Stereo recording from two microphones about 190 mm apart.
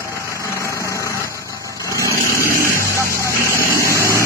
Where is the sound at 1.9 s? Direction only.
15° right (ahead or behind).